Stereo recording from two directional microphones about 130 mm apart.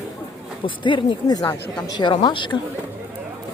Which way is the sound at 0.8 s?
35° left (ahead or behind).